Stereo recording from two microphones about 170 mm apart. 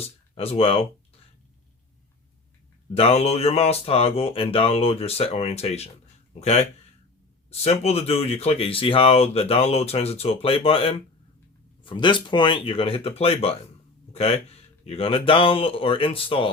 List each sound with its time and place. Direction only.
0.0 s speech: 35° left (ahead or behind)
2.9 s speech: 35° left (ahead or behind)